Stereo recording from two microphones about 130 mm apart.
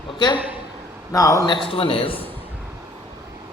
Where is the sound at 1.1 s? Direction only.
25° left (ahead or behind).